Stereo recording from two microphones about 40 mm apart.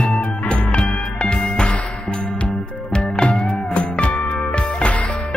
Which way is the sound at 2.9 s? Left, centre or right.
Left.